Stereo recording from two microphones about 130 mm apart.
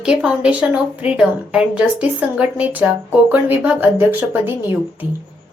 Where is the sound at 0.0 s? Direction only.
5° right (ahead or behind).